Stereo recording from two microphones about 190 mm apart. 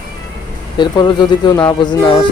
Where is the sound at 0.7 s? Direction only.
25° left (ahead or behind).